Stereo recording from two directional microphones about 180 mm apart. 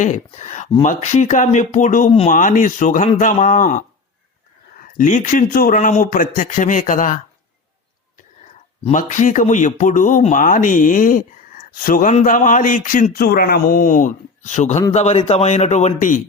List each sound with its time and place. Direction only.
0.0 s speech: 40° left (ahead or behind)
8.8 s speech: 40° left (ahead or behind)